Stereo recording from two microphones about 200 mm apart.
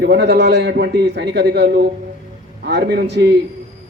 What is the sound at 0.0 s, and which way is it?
A man's voice, 55° right (ahead or behind).